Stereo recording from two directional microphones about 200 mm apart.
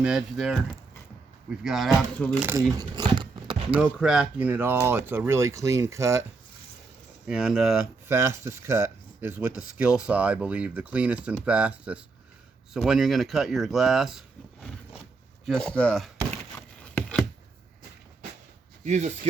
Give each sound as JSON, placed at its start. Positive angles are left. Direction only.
{"t": 0.0, "sound": "speech", "side_deg": -5}
{"t": 2.4, "sound": "speech", "side_deg": -10}
{"t": 2.7, "sound": "a sound", "side_deg": -20}
{"t": 3.8, "sound": "speech", "side_deg": -5}
{"t": 7.3, "sound": "speech", "side_deg": -5}
{"t": 8.0, "sound": "speech", "side_deg": -15}
{"t": 16.8, "sound": "a sound", "side_deg": 5}
{"t": 18.9, "sound": "speech", "side_deg": -35}